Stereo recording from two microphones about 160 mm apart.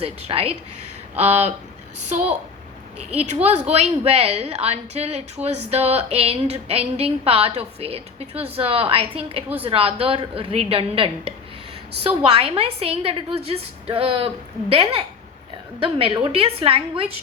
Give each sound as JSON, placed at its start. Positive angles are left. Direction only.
{"t": 0.0, "sound": "a woman's voice", "side_deg": -35}
{"t": 3.1, "sound": "a woman's voice", "side_deg": -40}